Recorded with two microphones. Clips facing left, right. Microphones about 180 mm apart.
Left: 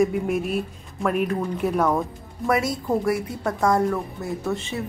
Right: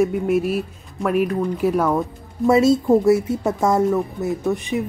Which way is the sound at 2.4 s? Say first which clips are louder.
Right 8 dB; 25° right (ahead or behind).